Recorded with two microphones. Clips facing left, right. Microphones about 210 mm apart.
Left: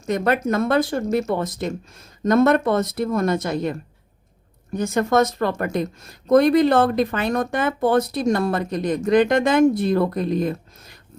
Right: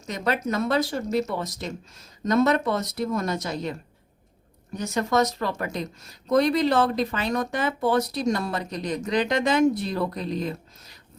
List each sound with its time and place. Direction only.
0.0 s a woman's voice: 55° left (ahead or behind)
4.8 s a woman's voice: 50° left (ahead or behind)